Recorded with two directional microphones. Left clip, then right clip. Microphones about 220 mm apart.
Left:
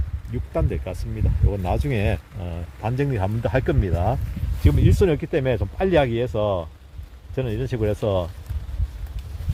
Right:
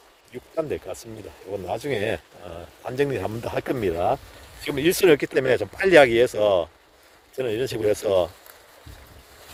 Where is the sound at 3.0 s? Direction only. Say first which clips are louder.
Right 2 dB; 55° right (ahead or behind).